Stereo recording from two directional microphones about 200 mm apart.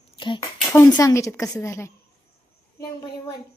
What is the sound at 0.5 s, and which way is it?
Speech, centre (ahead or behind).